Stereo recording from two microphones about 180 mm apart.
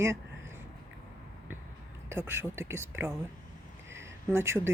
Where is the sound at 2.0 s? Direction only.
15° right (ahead or behind).